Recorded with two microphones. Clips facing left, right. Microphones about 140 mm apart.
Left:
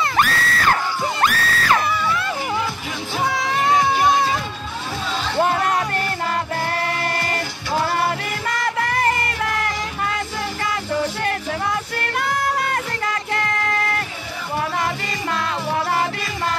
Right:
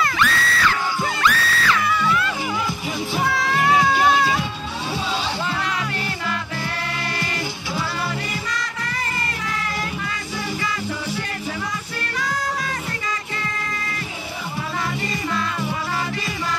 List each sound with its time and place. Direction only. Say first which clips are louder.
0.1 s screaming: left 2 dB; 45° left (ahead or behind)
1.2 s music: even; 45° left (ahead or behind)
3.3 s music: left 1 dB; 20° left (ahead or behind)
5.4 s music: left 7 dB; 50° left (ahead or behind)
7.7 s music: left 8 dB; 50° left (ahead or behind)
11.2 s music: left 5 dB; 60° left (ahead or behind)